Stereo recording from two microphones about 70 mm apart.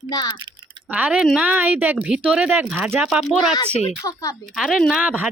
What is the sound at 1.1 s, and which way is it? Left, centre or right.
Speech, centre.